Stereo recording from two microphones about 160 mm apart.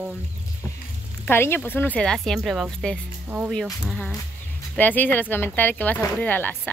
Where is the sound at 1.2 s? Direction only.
15° left (ahead or behind).